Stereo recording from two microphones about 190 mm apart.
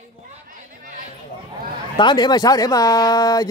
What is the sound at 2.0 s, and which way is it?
Speech, 25° left (ahead or behind).